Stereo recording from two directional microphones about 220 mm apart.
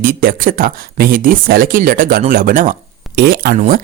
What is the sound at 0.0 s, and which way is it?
Speech, 40° right (ahead or behind).